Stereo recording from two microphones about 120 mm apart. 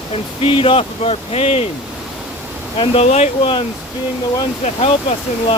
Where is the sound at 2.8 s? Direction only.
60° left (ahead or behind).